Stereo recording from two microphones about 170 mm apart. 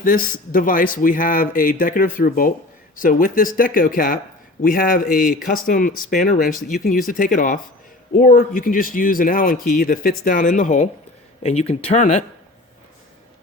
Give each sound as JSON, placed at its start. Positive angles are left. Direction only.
{"t": 0.0, "sound": "speech", "side_deg": 55}